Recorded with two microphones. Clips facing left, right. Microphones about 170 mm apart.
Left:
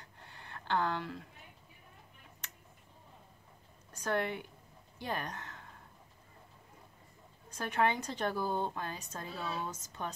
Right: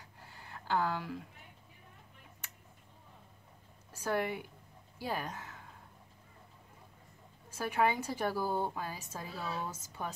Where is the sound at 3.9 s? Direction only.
10° right (ahead or behind).